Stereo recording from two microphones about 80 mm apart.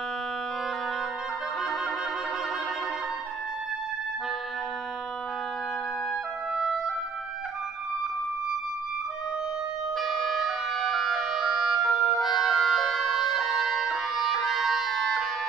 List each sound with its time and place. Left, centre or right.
6.5 s music: centre
9.9 s music: centre